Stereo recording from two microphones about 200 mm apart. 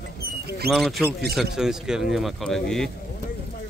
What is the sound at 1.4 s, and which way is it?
Speech, centre (ahead or behind).